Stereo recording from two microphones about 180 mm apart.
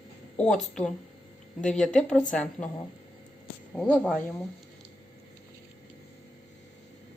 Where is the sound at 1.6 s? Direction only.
5° left (ahead or behind).